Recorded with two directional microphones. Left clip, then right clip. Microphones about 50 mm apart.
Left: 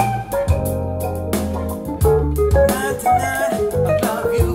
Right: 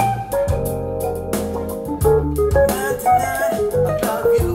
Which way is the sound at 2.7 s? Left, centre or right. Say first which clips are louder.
Right 1 dB; right.